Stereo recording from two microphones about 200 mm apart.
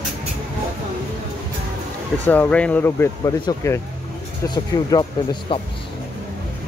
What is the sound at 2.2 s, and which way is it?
Speech, 10° left (ahead or behind).